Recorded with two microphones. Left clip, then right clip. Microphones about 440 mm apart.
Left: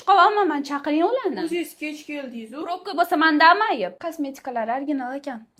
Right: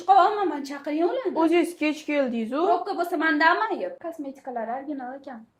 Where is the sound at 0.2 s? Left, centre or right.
Left.